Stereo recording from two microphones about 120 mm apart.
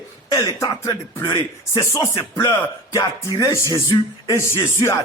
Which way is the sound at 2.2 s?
40° left (ahead or behind).